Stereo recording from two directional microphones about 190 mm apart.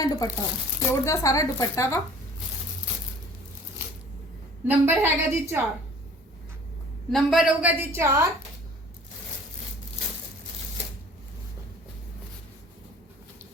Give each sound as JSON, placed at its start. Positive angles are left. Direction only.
{"t": 0.0, "sound": "a woman's voice", "side_deg": 20}
{"t": 4.7, "sound": "a woman's voice", "side_deg": -10}
{"t": 7.1, "sound": "a woman's voice", "side_deg": 0}